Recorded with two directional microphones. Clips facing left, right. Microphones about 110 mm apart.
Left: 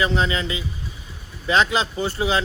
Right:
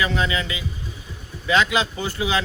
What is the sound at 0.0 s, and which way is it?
Speech, 30° left (ahead or behind).